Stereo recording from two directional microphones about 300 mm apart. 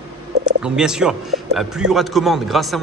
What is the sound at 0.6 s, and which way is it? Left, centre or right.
A man's voice, centre.